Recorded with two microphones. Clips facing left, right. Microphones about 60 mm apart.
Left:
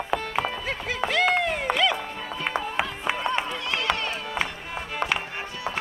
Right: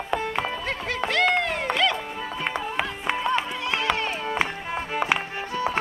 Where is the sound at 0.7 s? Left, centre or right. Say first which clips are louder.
Right 1 dB; centre.